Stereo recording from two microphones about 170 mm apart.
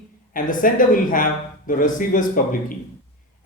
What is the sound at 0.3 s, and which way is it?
Speech, 50° left (ahead or behind).